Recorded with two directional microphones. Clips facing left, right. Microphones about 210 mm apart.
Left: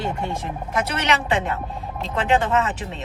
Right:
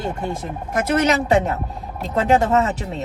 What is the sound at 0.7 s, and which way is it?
A woman's voice, 45° right (ahead or behind).